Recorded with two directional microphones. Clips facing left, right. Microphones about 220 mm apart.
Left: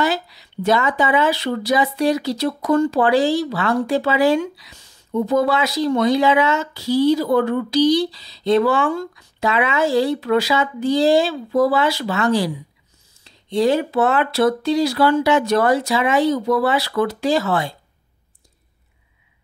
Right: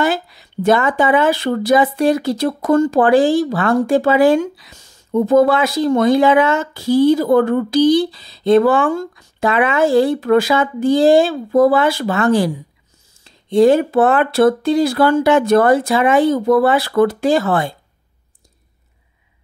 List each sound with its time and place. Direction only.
0.0 s speech: 50° right (ahead or behind)